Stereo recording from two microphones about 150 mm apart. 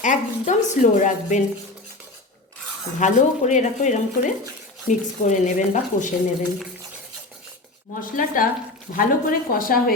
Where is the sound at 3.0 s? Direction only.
55° left (ahead or behind).